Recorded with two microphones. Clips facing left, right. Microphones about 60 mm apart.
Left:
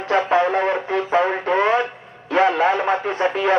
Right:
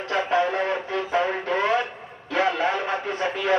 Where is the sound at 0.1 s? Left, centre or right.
Left.